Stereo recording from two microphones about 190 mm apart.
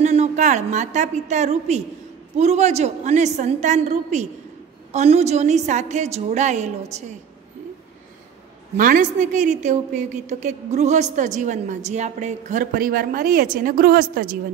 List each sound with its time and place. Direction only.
0.0 s a woman's voice: 35° right (ahead or behind)
8.7 s a woman's voice: 45° right (ahead or behind)